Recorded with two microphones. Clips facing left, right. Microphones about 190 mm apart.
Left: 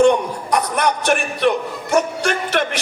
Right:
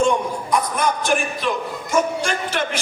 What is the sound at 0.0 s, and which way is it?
A man's voice, 65° left (ahead or behind).